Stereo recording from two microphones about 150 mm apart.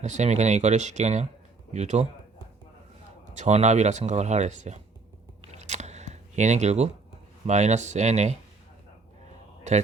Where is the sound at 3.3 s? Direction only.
50° right (ahead or behind).